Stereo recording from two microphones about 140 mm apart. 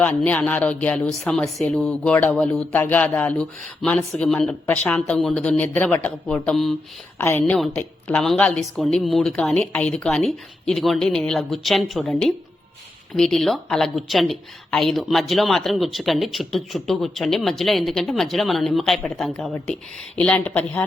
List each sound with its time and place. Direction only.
0.0 s speech: 10° left (ahead or behind)
2.7 s speech: 10° left (ahead or behind)
7.2 s speech: 15° left (ahead or behind)